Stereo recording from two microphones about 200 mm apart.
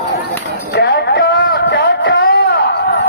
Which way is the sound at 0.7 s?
55° left (ahead or behind).